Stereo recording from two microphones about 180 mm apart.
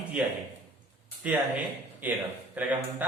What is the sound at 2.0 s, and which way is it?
Speech, 10° right (ahead or behind).